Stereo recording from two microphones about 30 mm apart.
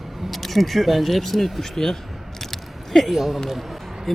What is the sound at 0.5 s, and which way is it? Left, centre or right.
Speech, centre.